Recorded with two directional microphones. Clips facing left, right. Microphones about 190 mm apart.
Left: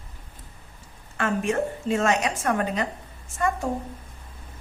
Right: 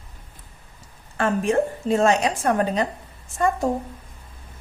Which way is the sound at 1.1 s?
35° right (ahead or behind).